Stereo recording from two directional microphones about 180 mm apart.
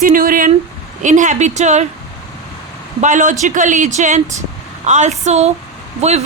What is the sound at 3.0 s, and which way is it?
Speech, 45° right (ahead or behind).